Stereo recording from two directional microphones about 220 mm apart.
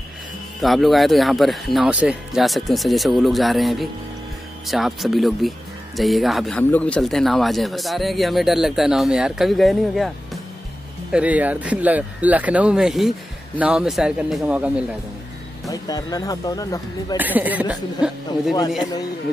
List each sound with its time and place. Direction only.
0.6 s a man's voice: centre (ahead or behind)
15.7 s speech: 15° left (ahead or behind)
17.2 s speech: 5° right (ahead or behind)